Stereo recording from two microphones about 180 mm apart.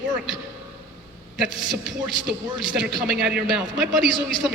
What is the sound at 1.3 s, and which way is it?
A woman's voice, centre (ahead or behind).